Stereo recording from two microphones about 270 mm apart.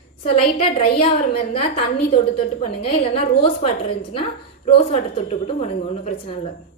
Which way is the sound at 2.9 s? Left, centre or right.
Left.